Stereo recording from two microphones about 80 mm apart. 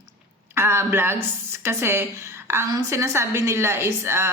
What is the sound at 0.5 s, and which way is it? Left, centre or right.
A woman's voice, right.